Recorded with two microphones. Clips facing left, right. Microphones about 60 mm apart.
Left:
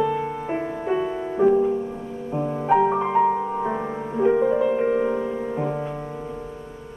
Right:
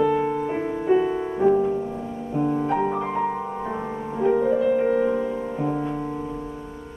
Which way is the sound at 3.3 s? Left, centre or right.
Centre.